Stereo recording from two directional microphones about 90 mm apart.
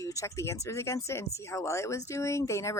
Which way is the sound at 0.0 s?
35° left (ahead or behind).